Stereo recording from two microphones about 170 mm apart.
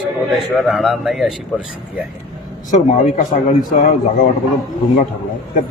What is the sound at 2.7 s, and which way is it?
Speech, 40° left (ahead or behind).